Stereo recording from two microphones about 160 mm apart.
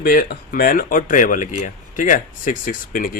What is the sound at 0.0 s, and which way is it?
Speech, 70° left (ahead or behind).